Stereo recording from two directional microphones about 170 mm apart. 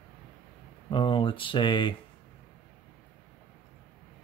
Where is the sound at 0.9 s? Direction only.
30° left (ahead or behind).